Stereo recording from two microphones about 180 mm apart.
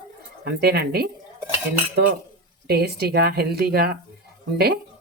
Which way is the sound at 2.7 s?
60° right (ahead or behind).